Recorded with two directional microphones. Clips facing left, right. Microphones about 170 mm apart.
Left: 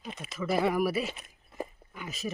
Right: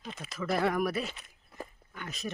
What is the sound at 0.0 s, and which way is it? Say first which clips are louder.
Speech: left 1 dB; 20° left (ahead or behind).